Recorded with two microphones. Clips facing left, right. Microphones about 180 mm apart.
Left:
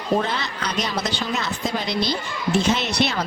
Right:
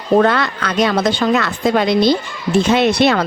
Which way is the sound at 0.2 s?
60° right (ahead or behind).